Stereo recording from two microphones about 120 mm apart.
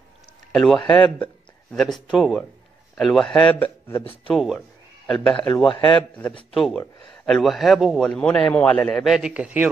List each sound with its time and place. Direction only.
0.5 s a man's voice: centre (ahead or behind)
3.5 s a man's voice: 15° left (ahead or behind)
4.0 s speech: 50° left (ahead or behind)
4.3 s a man's voice: centre (ahead or behind)
6.5 s a man's voice: centre (ahead or behind)